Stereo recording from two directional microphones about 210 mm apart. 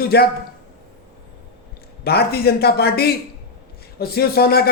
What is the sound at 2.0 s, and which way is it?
A man's voice, 50° left (ahead or behind).